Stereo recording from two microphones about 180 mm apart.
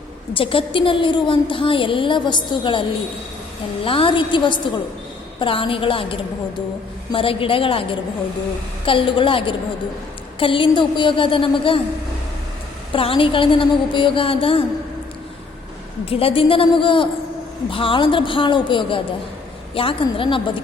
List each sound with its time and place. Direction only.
0.3 s a woman's voice: 30° left (ahead or behind)
3.8 s a woman's voice: 30° left (ahead or behind)
12.9 s a woman's voice: 30° left (ahead or behind)
16.0 s a woman's voice: 30° left (ahead or behind)